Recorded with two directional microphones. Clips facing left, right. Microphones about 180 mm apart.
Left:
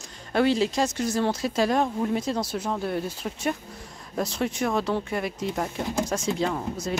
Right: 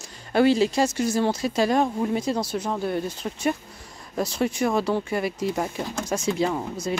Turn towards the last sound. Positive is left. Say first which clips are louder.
# right 2 dB
turn(degrees=0)  # may be behind; listen again after turning